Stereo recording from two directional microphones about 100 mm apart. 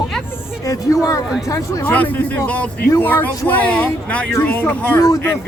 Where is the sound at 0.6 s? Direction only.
35° left (ahead or behind).